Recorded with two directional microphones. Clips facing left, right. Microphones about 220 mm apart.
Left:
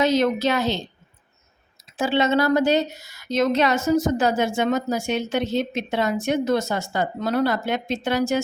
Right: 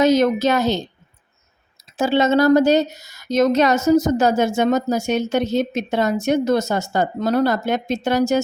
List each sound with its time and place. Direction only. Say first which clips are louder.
0.0 s speech: right 4 dB; 45° right (ahead or behind)
1.8 s speech: right 4 dB; 40° right (ahead or behind)